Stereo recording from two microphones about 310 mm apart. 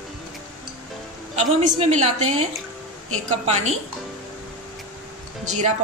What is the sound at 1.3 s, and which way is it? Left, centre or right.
A woman's voice, right.